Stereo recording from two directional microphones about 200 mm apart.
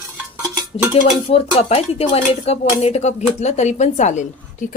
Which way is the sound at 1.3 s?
30° left (ahead or behind).